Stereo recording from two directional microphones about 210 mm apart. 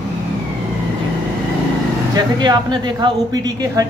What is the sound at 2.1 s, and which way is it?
Speech, 20° right (ahead or behind).